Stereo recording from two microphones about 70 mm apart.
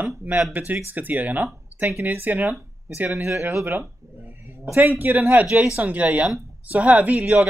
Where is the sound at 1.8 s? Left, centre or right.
Right.